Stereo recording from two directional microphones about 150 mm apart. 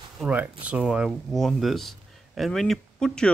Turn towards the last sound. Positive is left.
turn(degrees=5)  # may be behind; listen again after turning